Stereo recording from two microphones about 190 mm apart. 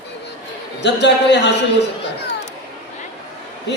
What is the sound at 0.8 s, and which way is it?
Speech, 65° left (ahead or behind).